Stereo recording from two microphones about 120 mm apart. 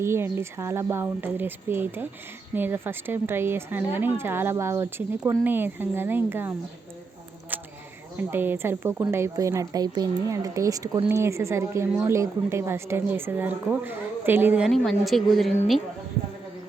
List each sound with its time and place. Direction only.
0.0 s a woman's voice: 20° right (ahead or behind)
8.3 s a woman's voice: 20° right (ahead or behind)
14.6 s a woman's voice: centre (ahead or behind)